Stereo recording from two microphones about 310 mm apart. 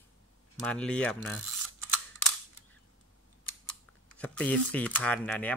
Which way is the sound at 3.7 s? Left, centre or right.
Centre.